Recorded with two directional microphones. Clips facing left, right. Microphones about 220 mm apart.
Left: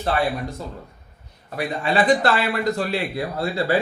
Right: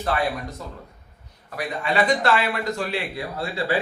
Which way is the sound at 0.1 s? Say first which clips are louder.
Left 2 dB; 30° left (ahead or behind).